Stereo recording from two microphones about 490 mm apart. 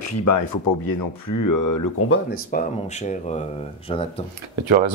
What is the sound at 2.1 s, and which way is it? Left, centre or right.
Speech, centre.